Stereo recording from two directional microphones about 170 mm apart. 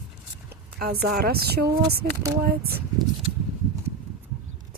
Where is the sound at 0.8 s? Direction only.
65° right (ahead or behind).